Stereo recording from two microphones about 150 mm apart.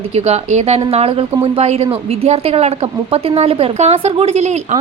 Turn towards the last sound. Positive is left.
turn(degrees=-45)  # may be behind; listen again after turning